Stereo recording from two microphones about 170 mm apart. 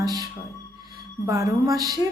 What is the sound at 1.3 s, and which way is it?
Speech, 20° right (ahead or behind).